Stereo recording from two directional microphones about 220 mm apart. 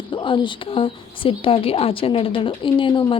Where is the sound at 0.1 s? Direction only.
20° left (ahead or behind).